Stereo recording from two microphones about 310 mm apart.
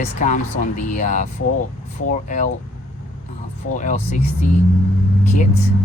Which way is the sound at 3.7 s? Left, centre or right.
Left.